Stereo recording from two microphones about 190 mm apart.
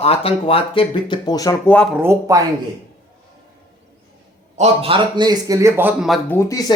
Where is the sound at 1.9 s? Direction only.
15° right (ahead or behind).